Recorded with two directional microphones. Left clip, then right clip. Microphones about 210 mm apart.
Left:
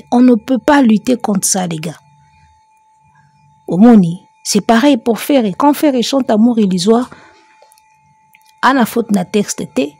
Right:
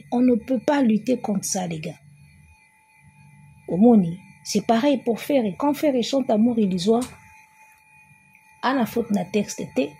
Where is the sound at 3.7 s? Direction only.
55° left (ahead or behind).